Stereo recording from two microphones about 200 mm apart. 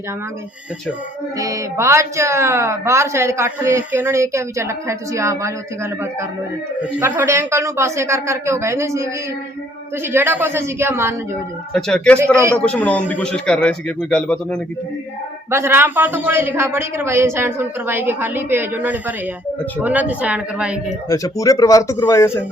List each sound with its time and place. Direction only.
1.4 s speech: 15° right (ahead or behind)
11.7 s speech: 5° left (ahead or behind)
15.4 s speech: 10° right (ahead or behind)
21.1 s a man's voice: 15° left (ahead or behind)